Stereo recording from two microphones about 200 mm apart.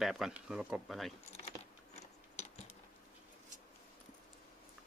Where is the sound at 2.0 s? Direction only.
35° left (ahead or behind).